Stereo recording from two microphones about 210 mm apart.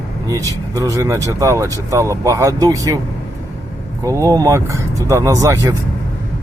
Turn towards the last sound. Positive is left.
turn(degrees=-15)  # may be behind; listen again after turning